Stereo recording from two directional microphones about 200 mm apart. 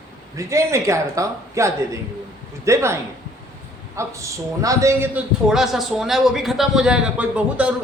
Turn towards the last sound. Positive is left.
turn(degrees=-5)  # may be behind; listen again after turning